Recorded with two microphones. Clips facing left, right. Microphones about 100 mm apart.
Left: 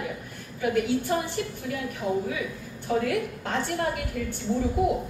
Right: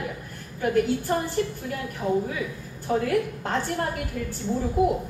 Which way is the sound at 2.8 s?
40° right (ahead or behind).